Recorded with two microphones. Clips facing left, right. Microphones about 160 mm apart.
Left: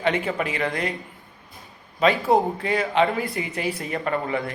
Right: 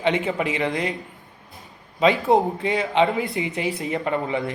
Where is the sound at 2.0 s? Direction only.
20° right (ahead or behind).